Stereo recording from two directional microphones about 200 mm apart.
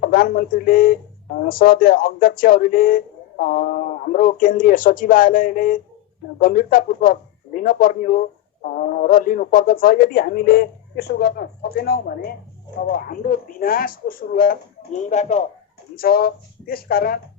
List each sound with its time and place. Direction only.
0.0 s speech: 50° left (ahead or behind)
16.0 s speech: 50° left (ahead or behind)